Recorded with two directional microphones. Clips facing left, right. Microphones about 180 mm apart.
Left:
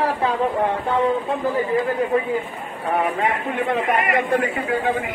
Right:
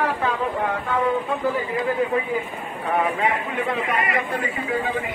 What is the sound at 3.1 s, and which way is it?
Speech, 50° left (ahead or behind).